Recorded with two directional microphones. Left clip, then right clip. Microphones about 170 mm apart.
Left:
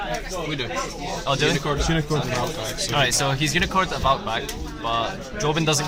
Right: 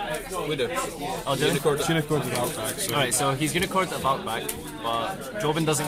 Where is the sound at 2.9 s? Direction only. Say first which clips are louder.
Left 3 dB; 15° left (ahead or behind).